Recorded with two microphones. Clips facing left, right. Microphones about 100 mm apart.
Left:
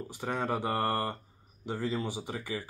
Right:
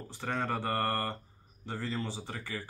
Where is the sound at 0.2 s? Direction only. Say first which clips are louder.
Left 2 dB; 15° left (ahead or behind).